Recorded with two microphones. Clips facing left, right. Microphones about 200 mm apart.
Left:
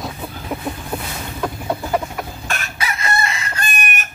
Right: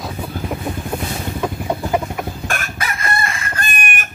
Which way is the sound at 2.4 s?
50° right (ahead or behind).